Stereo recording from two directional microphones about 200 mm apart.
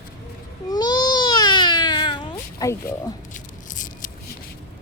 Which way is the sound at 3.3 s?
40° left (ahead or behind).